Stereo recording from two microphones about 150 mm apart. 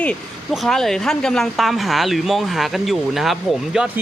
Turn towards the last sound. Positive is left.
turn(degrees=-5)  # may be behind; listen again after turning